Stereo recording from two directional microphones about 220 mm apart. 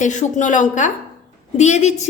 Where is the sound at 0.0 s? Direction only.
35° left (ahead or behind).